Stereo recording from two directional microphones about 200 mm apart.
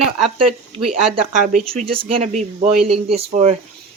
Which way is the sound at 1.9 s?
25° right (ahead or behind).